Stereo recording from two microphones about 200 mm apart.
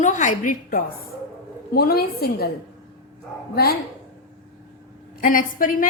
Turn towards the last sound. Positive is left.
turn(degrees=45)  # may be behind; listen again after turning